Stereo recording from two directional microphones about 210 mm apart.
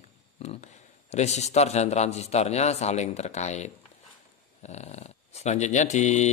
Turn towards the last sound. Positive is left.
turn(degrees=35)  # may be behind; listen again after turning